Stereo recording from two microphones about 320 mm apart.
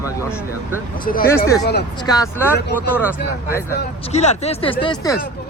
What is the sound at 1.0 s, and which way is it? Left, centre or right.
Speech, left.